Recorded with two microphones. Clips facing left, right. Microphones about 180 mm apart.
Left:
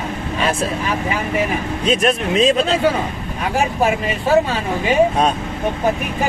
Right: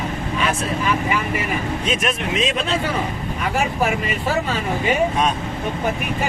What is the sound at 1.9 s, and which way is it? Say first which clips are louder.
Speech: left 8 dB; 35° left (ahead or behind).